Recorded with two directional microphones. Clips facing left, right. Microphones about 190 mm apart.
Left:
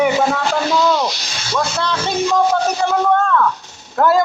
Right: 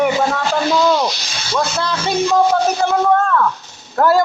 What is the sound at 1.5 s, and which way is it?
Speech, 5° right (ahead or behind).